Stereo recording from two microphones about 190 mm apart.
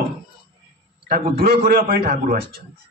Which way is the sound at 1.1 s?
55° right (ahead or behind).